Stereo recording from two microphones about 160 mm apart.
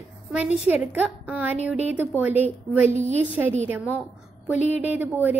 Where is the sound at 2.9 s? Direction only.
45° right (ahead or behind).